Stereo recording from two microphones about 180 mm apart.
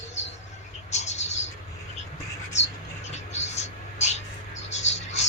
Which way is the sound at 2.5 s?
40° left (ahead or behind).